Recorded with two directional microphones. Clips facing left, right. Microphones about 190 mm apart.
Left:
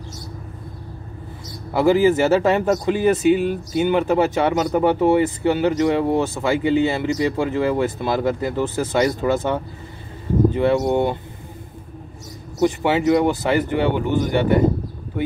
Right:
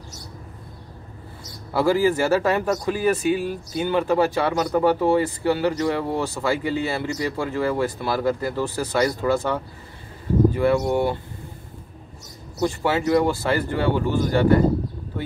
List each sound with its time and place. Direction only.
1.7 s speech: 20° left (ahead or behind)
12.5 s speech: 20° left (ahead or behind)